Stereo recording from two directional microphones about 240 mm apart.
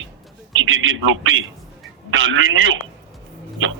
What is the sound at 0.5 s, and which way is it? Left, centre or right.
A man's voice, right.